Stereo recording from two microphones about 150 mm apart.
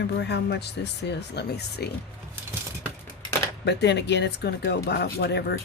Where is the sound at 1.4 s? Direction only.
90° left.